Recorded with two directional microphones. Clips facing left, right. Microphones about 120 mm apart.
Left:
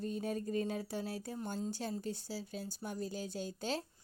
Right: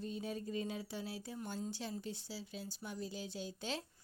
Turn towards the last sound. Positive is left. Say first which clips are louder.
# left 4 dB
turn(degrees=40)  # may be behind; listen again after turning